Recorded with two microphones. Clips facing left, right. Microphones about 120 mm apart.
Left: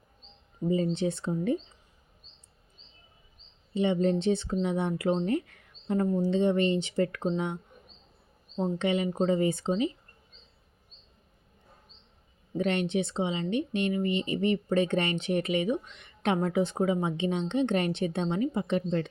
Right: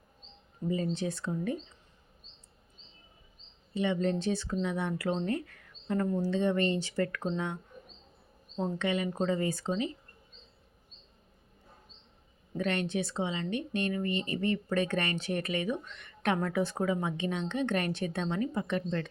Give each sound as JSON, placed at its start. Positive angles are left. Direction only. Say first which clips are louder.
{"t": 0.7, "sound": "speech", "louder": "left 5 dB", "side_deg": 25}
{"t": 3.8, "sound": "speech", "louder": "left 4 dB", "side_deg": 25}
{"t": 8.8, "sound": "speech", "louder": "left 4 dB", "side_deg": 25}
{"t": 12.5, "sound": "speech", "louder": "left 4 dB", "side_deg": 20}